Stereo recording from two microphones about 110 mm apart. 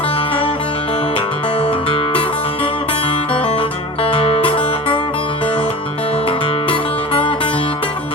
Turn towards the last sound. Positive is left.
turn(degrees=55)  # may be behind; listen again after turning